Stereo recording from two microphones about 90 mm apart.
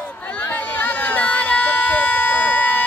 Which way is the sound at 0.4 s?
20° left (ahead or behind).